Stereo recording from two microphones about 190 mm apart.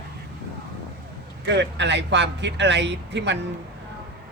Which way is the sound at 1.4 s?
65° right (ahead or behind).